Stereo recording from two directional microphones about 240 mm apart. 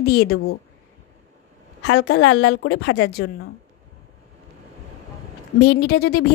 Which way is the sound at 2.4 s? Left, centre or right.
Left.